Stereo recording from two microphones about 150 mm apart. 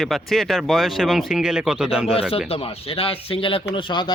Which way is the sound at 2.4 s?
40° left (ahead or behind).